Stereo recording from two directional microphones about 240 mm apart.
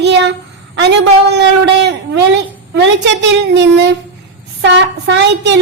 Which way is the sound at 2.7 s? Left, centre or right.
Right.